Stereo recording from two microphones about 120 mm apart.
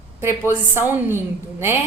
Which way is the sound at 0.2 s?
20° right (ahead or behind).